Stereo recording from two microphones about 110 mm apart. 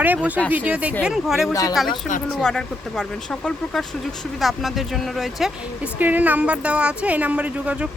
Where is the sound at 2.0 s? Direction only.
5° left (ahead or behind).